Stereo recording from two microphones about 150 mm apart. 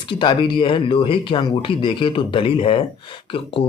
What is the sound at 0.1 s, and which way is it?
Speech, 35° left (ahead or behind).